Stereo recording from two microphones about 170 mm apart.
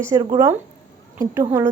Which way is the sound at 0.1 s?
20° right (ahead or behind).